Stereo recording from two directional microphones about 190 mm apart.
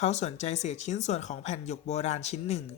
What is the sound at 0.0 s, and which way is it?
Speech, 35° left (ahead or behind).